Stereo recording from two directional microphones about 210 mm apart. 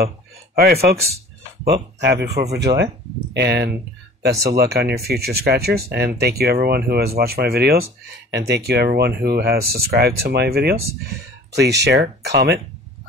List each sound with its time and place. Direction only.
0.6 s speech: 45° right (ahead or behind)